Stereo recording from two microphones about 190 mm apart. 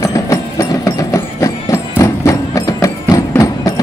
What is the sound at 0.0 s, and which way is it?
Music, 15° left (ahead or behind).